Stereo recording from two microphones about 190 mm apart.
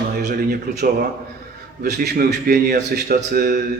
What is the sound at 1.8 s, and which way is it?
A man's voice, 55° right (ahead or behind).